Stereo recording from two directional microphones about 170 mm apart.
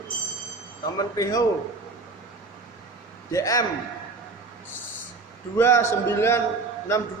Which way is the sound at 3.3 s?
20° left (ahead or behind).